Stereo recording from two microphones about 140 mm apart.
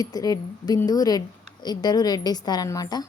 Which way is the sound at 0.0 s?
25° left (ahead or behind).